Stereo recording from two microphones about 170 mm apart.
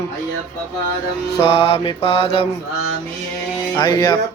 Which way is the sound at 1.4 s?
35° left (ahead or behind).